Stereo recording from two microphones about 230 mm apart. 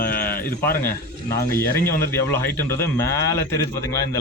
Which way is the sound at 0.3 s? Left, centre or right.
Centre.